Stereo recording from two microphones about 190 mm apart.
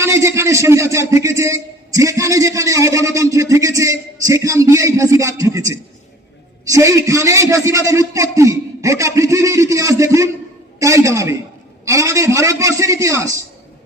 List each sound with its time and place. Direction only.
0.0 s a man's voice: 15° right (ahead or behind)